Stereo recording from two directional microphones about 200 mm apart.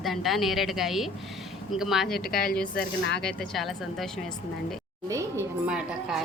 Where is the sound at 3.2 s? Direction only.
5° left (ahead or behind).